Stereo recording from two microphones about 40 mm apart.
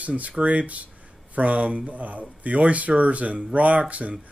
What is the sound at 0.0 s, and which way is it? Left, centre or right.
Speech, right.